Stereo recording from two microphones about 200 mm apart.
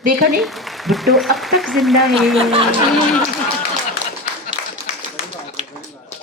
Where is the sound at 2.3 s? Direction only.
30° right (ahead or behind).